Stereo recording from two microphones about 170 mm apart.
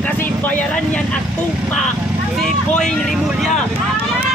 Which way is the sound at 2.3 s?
Centre (ahead or behind).